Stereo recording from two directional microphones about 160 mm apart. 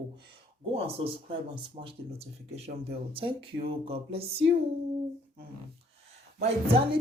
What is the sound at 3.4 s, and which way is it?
Speech, 80° right.